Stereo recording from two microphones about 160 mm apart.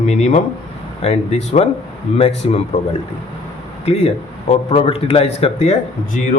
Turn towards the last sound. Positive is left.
turn(degrees=45)  # may be behind; listen again after turning